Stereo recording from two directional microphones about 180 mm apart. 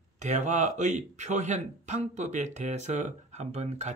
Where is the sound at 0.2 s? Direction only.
40° right (ahead or behind).